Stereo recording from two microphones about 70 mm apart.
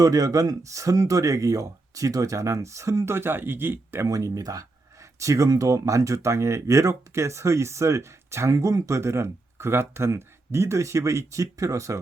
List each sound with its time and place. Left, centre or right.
0.0 s speech: right
4.0 s speech: right